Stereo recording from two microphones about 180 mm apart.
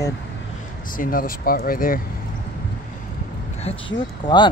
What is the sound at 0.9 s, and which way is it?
Speech, 50° left (ahead or behind).